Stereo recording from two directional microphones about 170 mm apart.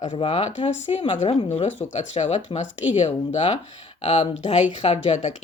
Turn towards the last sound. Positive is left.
turn(degrees=40)  # may be behind; listen again after turning